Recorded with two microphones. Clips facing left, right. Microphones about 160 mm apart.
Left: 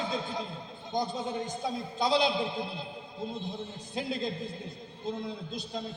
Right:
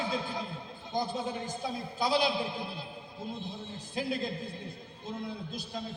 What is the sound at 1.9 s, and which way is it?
A man's voice, 25° left (ahead or behind).